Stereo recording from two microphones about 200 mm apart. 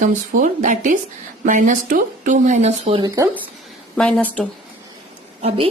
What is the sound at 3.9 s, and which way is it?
Speech, 5° left (ahead or behind).